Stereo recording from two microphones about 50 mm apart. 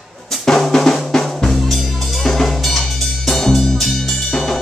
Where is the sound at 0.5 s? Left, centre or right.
Centre.